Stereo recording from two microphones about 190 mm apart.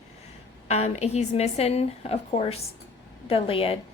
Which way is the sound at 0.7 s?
35° left (ahead or behind).